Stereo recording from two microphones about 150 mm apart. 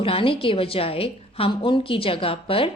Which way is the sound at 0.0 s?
35° left (ahead or behind).